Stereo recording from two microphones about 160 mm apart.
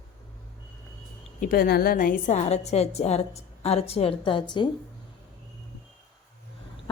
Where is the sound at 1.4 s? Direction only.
65° left (ahead or behind).